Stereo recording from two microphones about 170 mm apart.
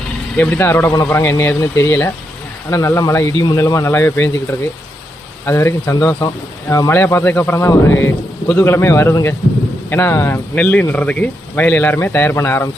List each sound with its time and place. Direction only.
0.3 s speech: 10° left (ahead or behind)
5.5 s speech: 15° left (ahead or behind)